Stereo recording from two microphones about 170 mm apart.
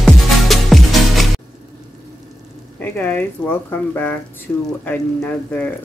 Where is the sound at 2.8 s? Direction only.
10° left (ahead or behind).